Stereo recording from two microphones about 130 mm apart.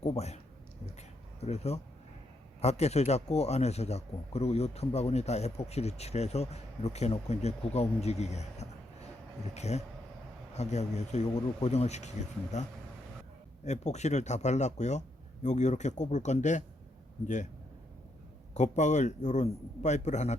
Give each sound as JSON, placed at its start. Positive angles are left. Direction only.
{"t": 0.0, "sound": "speech", "side_deg": 55}
{"t": 1.4, "sound": "speech", "side_deg": 55}
{"t": 13.7, "sound": "speech", "side_deg": 60}
{"t": 18.5, "sound": "speech", "side_deg": 65}